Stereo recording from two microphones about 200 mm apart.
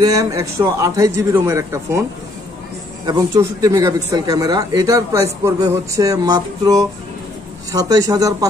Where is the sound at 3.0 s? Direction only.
20° right (ahead or behind).